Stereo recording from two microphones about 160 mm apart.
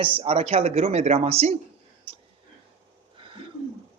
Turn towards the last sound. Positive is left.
turn(degrees=-30)  # may be behind; listen again after turning